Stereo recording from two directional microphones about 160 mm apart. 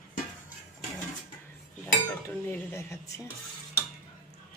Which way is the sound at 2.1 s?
15° left (ahead or behind).